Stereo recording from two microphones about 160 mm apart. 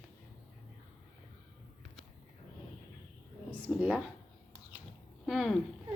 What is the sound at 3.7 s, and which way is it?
Speech, centre (ahead or behind).